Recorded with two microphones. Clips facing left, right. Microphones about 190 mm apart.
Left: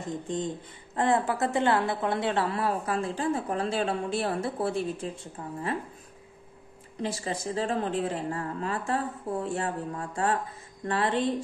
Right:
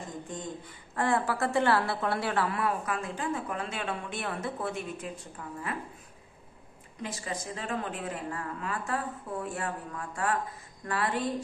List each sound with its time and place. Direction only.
0.9 s a woman's voice: 20° left (ahead or behind)
7.0 s a woman's voice: 30° left (ahead or behind)